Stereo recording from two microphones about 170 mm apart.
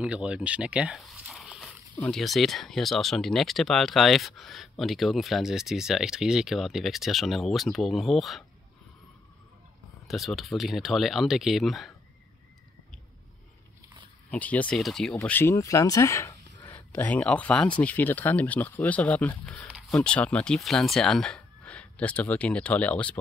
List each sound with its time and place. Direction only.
0.0 s speech: 5° right (ahead or behind)
10.0 s speech: centre (ahead or behind)
14.3 s speech: 10° left (ahead or behind)
15.1 s speech: 15° left (ahead or behind)